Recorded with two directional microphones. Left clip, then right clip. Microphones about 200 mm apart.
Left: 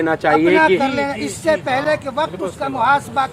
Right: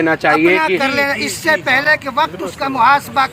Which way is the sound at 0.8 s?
5° left (ahead or behind).